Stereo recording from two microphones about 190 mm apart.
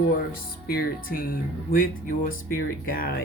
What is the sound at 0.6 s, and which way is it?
Speech, 50° left (ahead or behind).